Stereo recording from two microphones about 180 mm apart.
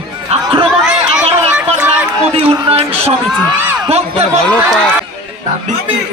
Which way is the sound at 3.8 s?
35° right (ahead or behind).